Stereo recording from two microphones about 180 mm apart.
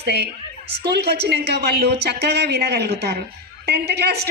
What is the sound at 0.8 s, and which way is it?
A woman's voice, 70° right (ahead or behind).